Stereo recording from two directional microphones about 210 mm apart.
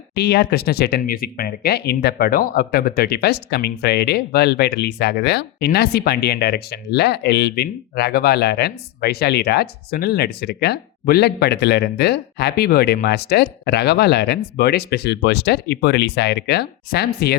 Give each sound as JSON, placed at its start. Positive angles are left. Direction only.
{"t": 0.1, "sound": "speech", "side_deg": 50}